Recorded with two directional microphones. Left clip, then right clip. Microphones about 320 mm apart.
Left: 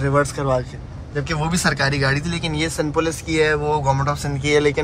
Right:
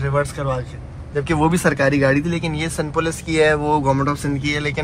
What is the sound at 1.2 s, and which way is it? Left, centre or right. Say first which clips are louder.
Speech: right 5 dB; centre.